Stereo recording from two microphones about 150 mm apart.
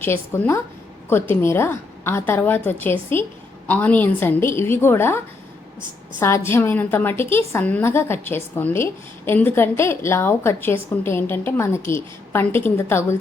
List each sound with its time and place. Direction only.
0.0 s a woman's voice: 15° left (ahead or behind)